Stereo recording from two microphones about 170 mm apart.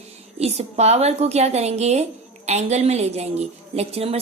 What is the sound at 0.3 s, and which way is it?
A woman's voice, 40° right (ahead or behind).